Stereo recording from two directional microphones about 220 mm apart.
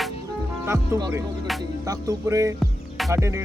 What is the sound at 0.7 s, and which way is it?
Music, 10° right (ahead or behind).